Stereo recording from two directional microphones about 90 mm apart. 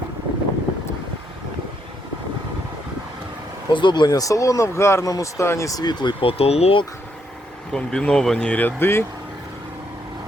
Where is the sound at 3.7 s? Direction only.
60° left (ahead or behind).